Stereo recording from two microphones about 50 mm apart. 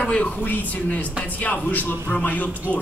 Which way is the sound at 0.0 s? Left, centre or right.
Left.